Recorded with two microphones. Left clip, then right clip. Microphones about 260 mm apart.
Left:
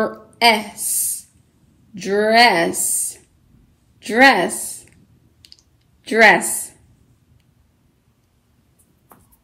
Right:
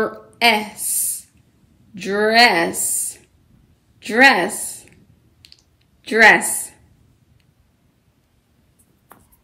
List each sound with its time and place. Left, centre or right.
0.0 s a woman's voice: centre
0.7 s a sound: left
2.0 s a woman's voice: centre
4.0 s a woman's voice: centre
6.0 s a woman's voice: centre
6.4 s speech: left